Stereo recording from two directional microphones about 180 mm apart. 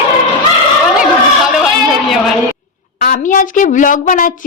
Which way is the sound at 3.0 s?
50° left (ahead or behind).